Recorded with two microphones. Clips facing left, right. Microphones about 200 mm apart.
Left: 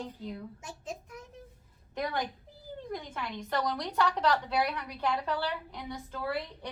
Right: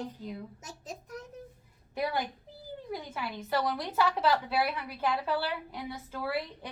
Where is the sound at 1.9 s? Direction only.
10° right (ahead or behind).